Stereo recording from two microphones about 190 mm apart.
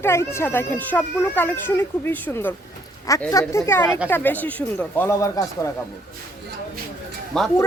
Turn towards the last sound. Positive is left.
turn(degrees=0)  # may be behind; listen again after turning